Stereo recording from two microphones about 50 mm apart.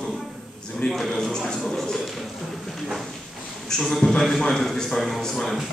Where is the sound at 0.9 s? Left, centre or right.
Centre.